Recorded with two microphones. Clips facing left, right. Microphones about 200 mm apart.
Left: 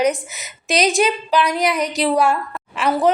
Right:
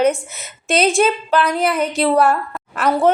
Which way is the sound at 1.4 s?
15° left (ahead or behind).